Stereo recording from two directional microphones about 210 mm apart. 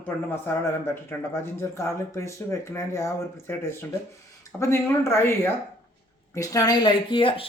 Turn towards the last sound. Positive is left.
turn(degrees=25)  # may be behind; listen again after turning